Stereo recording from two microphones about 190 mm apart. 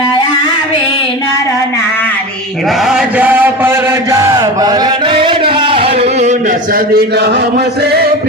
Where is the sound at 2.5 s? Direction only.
Centre (ahead or behind).